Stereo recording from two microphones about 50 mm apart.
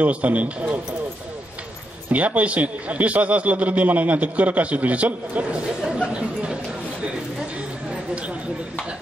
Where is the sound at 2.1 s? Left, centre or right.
Right.